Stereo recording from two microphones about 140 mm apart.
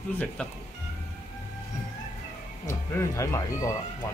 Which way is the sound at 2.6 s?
20° left (ahead or behind).